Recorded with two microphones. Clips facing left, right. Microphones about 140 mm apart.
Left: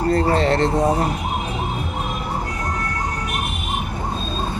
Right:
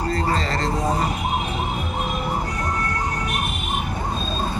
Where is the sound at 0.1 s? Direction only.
65° left (ahead or behind).